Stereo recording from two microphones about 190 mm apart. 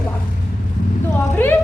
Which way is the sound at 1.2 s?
10° left (ahead or behind).